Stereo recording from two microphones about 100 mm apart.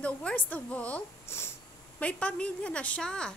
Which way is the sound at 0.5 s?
15° left (ahead or behind).